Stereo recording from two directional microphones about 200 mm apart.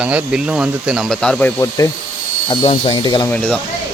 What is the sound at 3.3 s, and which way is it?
Speech, 5° left (ahead or behind).